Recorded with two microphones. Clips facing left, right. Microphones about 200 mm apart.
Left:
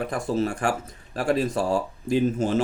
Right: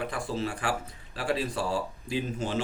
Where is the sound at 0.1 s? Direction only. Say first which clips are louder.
Left 7 dB; 45° left (ahead or behind).